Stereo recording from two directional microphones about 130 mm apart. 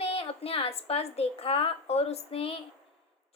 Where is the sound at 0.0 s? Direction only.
50° left (ahead or behind).